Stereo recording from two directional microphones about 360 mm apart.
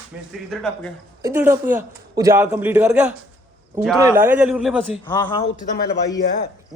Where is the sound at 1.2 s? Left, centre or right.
Centre.